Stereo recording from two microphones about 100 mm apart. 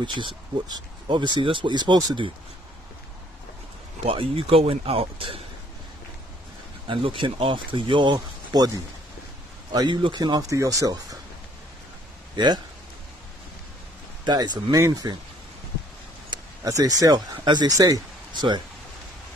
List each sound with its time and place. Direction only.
0.0 s speech: 50° right (ahead or behind)
4.0 s speech: 70° right (ahead or behind)
6.9 s a man's voice: 60° right (ahead or behind)
10.5 s speech: 35° right (ahead or behind)
14.2 s speech: 45° right (ahead or behind)
16.3 s speech: 40° right (ahead or behind)